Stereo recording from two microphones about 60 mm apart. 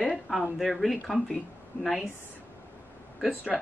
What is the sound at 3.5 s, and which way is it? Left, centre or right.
Speech, centre.